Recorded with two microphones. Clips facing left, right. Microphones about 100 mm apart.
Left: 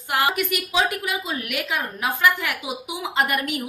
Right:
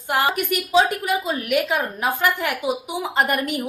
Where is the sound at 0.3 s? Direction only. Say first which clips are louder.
Right 4 dB; 40° right (ahead or behind).